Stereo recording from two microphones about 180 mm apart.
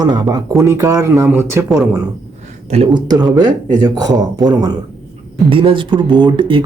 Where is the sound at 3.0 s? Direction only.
25° right (ahead or behind).